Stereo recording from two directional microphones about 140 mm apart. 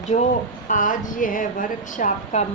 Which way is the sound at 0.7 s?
70° left (ahead or behind).